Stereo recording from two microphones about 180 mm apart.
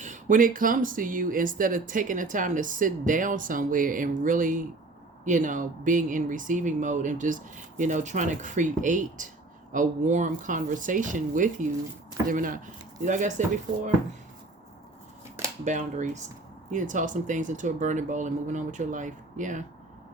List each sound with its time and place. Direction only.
0.0 s speech: 45° right (ahead or behind)
15.6 s speech: 40° right (ahead or behind)